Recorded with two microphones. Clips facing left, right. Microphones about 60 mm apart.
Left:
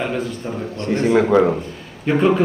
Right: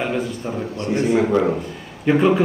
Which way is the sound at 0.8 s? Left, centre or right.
Left.